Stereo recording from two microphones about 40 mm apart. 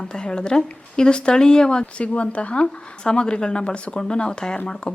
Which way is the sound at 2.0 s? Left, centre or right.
Left.